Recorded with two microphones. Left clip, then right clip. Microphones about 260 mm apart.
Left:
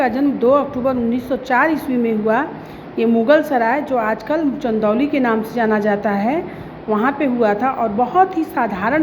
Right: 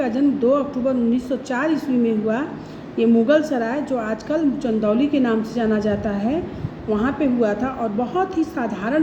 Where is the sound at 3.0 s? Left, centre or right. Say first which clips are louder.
Left 3 dB; centre.